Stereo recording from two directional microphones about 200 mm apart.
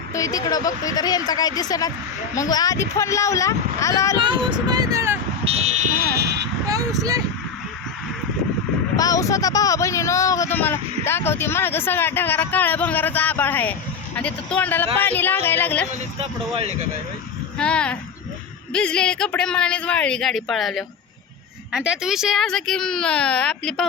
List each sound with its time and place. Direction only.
0.1 s speech: 15° left (ahead or behind)
4.2 s speech: 25° right (ahead or behind)
5.5 s buzzer: 30° right (ahead or behind); by 6.5 s 55° right (ahead or behind)
6.7 s speech: 15° right (ahead or behind)
9.0 s speech: 15° left (ahead or behind)
17.6 s speech: 5° left (ahead or behind)